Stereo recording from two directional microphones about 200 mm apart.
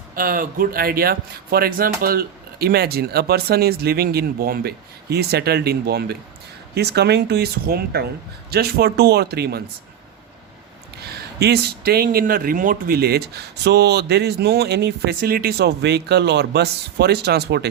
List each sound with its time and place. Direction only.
0.2 s speech: 45° right (ahead or behind)
11.0 s speech: 55° right (ahead or behind)